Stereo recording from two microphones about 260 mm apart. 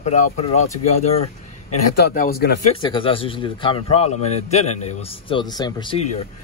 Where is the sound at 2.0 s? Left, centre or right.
Left.